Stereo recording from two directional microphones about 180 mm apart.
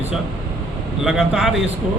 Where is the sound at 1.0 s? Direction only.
5° right (ahead or behind).